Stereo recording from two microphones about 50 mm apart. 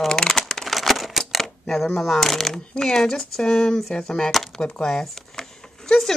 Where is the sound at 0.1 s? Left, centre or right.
Centre.